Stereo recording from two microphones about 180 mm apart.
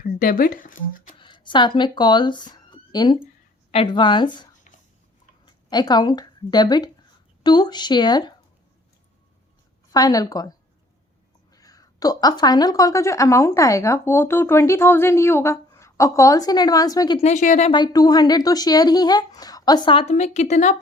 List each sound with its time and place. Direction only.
0.0 s speech: 50° left (ahead or behind)
1.2 s speech: 25° left (ahead or behind)
5.5 s speech: 25° left (ahead or behind)
9.9 s speech: 20° left (ahead or behind)
17.2 s speech: 40° left (ahead or behind)
17.7 s speech: 25° left (ahead or behind); by 20.8 s 40° left (ahead or behind)